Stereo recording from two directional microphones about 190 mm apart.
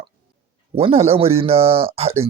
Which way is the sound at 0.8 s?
30° right (ahead or behind).